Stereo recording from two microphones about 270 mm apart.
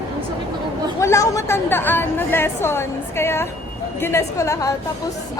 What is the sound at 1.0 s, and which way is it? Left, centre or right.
A woman's voice, centre.